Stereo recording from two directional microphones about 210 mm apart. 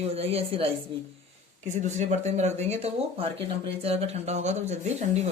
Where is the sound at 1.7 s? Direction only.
35° right (ahead or behind).